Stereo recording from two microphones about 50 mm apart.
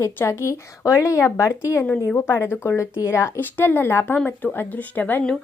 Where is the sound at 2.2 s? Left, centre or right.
Left.